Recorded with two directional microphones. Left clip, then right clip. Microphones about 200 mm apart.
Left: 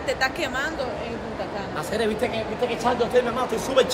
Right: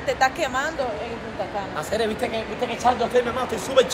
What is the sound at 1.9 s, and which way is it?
A man's voice, 10° left (ahead or behind).